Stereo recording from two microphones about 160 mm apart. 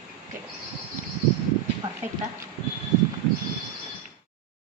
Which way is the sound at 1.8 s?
35° right (ahead or behind).